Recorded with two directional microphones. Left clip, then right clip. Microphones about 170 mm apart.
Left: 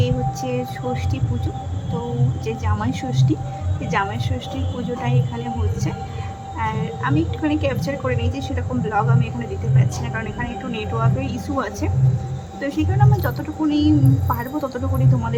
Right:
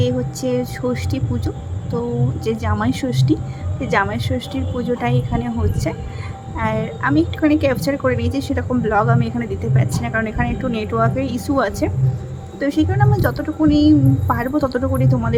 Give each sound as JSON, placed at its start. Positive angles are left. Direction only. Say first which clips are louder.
{"t": 0.0, "sound": "a sound", "louder": "right 3 dB", "side_deg": -30}
{"t": 2.4, "sound": "a woman's voice", "louder": "right 5 dB", "side_deg": -25}
{"t": 6.6, "sound": "a woman's voice", "louder": "right 4 dB", "side_deg": -30}